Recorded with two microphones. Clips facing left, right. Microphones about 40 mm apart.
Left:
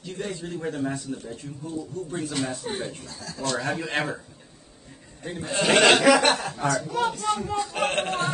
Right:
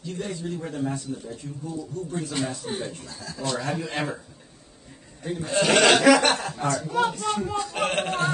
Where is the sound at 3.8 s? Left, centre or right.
Left.